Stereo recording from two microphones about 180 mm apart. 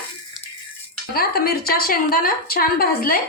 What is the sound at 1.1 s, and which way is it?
A woman's voice, 55° left (ahead or behind).